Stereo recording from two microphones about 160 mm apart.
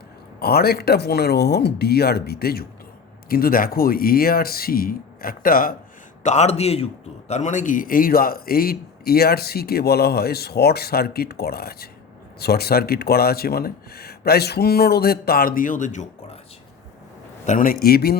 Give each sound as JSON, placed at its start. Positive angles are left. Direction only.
{"t": 0.3, "sound": "speech", "side_deg": 75}
{"t": 6.2, "sound": "a man's voice", "side_deg": 45}
{"t": 17.4, "sound": "a man's voice", "side_deg": 55}